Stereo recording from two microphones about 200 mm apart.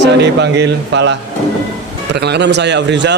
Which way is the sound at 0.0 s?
60° right (ahead or behind).